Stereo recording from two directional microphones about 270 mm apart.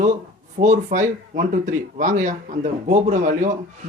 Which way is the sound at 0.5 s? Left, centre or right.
Right.